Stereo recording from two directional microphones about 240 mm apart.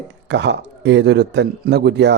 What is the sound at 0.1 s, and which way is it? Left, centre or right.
A man's voice, right.